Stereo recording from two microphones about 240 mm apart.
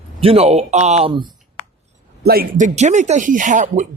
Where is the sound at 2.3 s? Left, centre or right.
Right.